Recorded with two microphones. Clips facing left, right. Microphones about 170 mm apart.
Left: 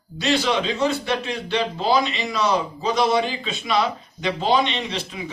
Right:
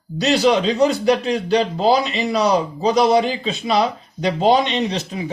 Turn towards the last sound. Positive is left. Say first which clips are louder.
# right 7 dB
turn(degrees=-40)  # may be behind; listen again after turning